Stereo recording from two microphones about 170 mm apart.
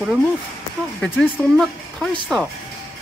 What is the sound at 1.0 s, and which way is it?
Speech, 5° left (ahead or behind).